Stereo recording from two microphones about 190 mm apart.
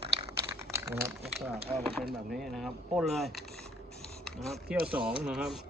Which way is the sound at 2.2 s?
Centre (ahead or behind).